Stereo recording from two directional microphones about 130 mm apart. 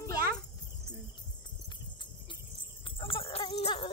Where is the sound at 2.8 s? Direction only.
40° left (ahead or behind).